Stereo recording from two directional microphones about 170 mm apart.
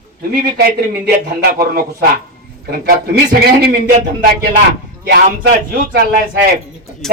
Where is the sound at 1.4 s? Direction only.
65° right (ahead or behind).